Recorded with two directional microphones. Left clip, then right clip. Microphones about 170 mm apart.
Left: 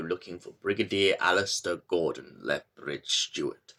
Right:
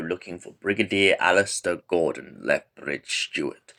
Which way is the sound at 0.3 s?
25° right (ahead or behind).